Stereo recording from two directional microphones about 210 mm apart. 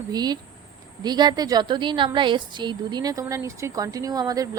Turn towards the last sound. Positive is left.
turn(degrees=-15)  # may be behind; listen again after turning